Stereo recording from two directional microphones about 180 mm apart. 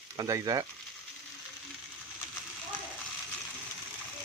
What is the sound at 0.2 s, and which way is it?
Speech, 20° right (ahead or behind).